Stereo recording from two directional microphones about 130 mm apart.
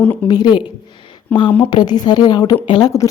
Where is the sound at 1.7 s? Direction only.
35° left (ahead or behind).